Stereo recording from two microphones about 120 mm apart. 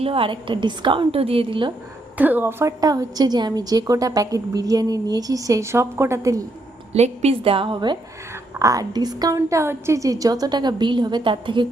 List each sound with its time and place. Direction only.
0.0 s a woman's voice: 50° right (ahead or behind)
2.1 s a woman's voice: 15° right (ahead or behind)
2.8 s a woman's voice: 30° right (ahead or behind)
6.9 s a woman's voice: 60° right (ahead or behind); by 7.9 s 40° right (ahead or behind)
8.5 s a woman's voice: 30° right (ahead or behind)